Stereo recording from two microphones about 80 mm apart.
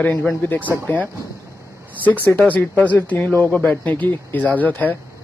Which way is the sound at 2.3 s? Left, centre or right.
Centre.